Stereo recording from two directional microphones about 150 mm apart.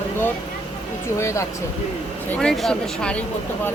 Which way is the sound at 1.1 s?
20° left (ahead or behind).